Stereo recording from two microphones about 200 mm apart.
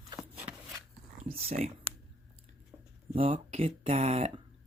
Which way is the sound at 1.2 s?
30° right (ahead or behind).